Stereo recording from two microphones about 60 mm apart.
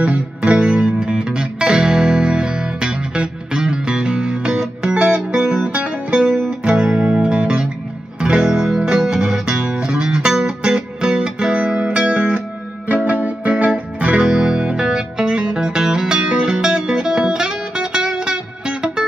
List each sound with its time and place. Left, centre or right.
0.0 s music: centre
14.3 s music: centre